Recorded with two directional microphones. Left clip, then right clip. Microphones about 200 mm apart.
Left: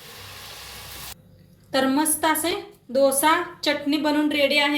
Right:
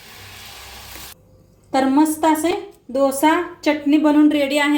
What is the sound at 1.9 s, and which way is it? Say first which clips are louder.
A woman's voice: right 6 dB; 35° right (ahead or behind).